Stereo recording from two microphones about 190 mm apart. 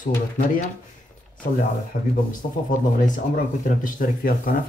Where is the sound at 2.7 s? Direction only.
45° left (ahead or behind).